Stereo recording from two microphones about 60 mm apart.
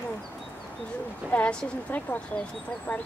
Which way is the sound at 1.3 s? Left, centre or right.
Left.